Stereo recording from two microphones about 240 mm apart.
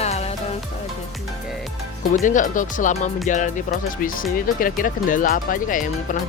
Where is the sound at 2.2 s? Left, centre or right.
Left.